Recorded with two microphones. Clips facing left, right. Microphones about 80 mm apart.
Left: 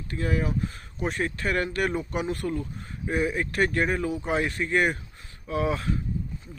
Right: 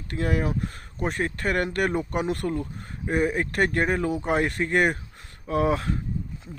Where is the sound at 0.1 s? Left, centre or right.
Right.